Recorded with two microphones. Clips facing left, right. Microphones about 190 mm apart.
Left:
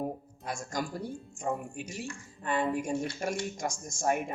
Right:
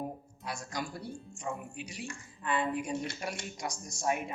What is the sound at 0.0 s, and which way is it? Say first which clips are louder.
Speech: left 4 dB; 45° left (ahead or behind).